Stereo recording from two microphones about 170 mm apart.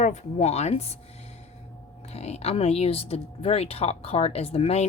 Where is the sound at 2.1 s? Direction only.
40° left (ahead or behind).